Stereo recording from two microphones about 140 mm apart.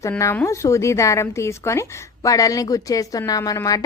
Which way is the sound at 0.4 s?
20° left (ahead or behind).